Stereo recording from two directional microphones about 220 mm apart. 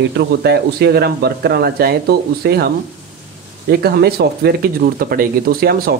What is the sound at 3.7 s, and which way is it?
Speech, 45° right (ahead or behind).